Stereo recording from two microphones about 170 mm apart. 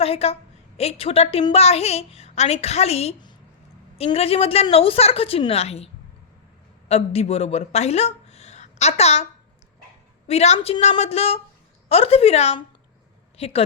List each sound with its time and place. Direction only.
0.0 s a woman's voice: 35° left (ahead or behind)
10.2 s a woman's voice: 40° left (ahead or behind)